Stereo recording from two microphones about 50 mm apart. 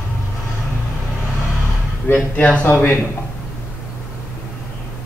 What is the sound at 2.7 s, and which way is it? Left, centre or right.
Speech, left.